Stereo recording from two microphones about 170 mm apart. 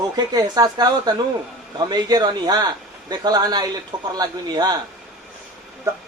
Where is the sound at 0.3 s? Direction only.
25° right (ahead or behind).